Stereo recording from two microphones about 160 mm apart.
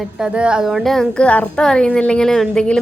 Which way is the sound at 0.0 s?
5° right (ahead or behind).